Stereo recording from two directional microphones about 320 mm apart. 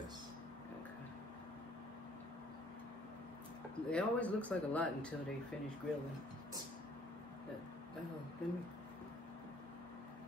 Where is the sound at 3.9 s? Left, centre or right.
Centre.